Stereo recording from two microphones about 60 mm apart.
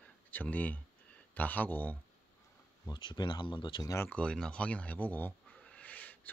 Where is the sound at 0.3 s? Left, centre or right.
Left.